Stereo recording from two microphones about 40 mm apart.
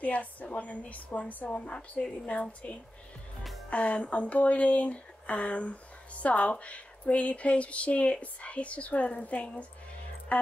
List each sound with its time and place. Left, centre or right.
0.0 s a woman's voice: left
3.7 s speech: left